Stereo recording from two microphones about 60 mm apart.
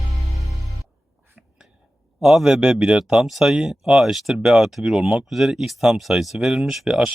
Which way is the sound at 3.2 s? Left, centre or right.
Centre.